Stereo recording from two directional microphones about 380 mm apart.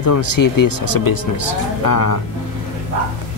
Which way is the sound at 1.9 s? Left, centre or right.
Left.